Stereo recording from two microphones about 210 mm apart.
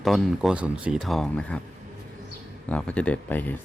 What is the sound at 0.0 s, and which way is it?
Speech, centre (ahead or behind).